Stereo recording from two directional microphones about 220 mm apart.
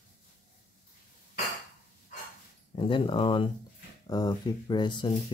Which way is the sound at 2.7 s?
25° left (ahead or behind).